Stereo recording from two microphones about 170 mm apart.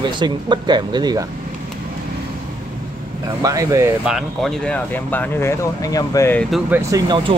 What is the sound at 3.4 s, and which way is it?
Speech, 20° right (ahead or behind).